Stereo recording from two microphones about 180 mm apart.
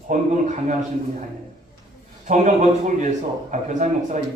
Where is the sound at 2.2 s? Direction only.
40° right (ahead or behind).